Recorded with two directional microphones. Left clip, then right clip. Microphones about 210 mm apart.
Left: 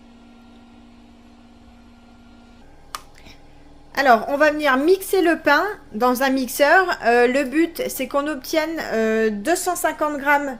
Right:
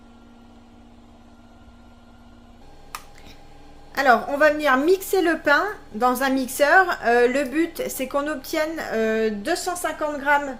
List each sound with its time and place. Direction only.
3.9 s a woman's voice: 20° left (ahead or behind)